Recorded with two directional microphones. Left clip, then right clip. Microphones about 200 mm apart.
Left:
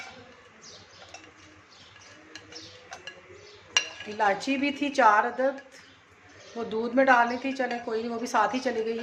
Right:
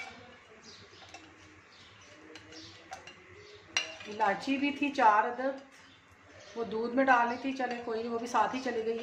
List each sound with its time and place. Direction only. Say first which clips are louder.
3.8 s a woman's voice: left 5 dB; 25° left (ahead or behind)
6.5 s a woman's voice: left 6 dB; 30° left (ahead or behind)